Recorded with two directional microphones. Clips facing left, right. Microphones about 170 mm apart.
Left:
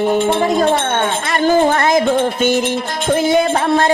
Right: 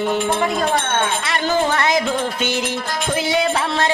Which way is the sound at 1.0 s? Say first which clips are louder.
Left 4 dB; 45° left (ahead or behind).